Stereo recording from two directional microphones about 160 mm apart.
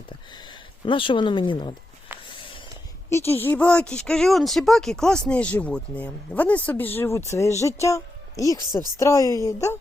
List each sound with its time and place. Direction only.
0.9 s speech: 30° left (ahead or behind)
3.1 s a woman's voice: 15° left (ahead or behind)